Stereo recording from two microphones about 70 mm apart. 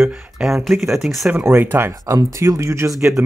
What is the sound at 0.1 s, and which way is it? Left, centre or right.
Speech, centre.